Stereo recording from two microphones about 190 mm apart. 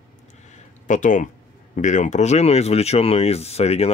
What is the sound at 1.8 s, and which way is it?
Speech, 40° left (ahead or behind).